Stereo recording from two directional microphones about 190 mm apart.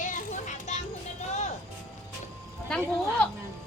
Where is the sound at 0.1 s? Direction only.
40° left (ahead or behind).